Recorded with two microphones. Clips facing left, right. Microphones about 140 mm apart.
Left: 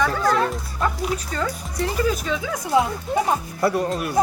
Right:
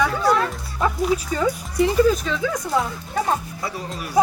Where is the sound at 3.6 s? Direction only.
60° left (ahead or behind).